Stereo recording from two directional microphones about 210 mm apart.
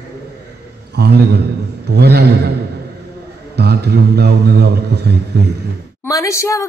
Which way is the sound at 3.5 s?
50° right (ahead or behind).